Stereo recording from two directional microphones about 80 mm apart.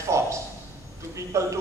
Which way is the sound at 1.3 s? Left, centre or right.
Right.